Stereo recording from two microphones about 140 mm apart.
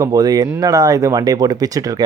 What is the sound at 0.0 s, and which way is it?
Speech, 25° right (ahead or behind).